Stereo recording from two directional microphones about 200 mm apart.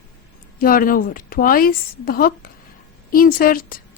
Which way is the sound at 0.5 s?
45° left (ahead or behind).